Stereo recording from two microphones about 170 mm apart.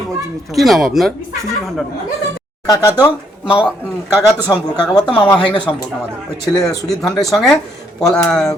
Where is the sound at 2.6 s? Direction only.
20° left (ahead or behind).